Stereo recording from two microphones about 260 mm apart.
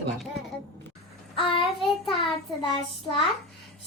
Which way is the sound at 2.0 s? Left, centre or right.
Centre.